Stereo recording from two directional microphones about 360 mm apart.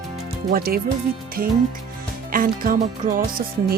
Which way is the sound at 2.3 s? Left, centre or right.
Right.